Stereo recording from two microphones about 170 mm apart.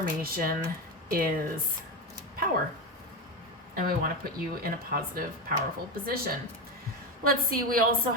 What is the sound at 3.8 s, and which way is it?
Speech, 55° right (ahead or behind).